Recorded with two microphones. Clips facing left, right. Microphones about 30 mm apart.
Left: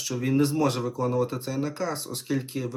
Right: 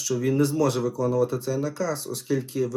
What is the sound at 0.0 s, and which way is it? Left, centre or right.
Speech, left.